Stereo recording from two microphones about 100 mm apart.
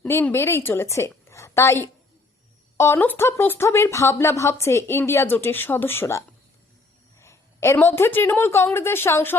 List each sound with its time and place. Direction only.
0.1 s a woman's voice: 25° left (ahead or behind)